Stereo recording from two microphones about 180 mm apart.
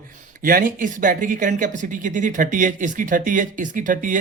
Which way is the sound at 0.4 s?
50° right (ahead or behind).